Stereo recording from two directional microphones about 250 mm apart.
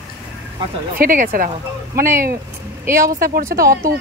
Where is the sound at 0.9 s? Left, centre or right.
Right.